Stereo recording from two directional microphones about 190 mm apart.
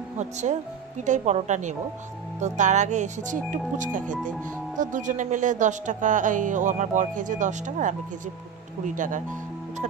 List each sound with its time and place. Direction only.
0.2 s speech: 40° right (ahead or behind)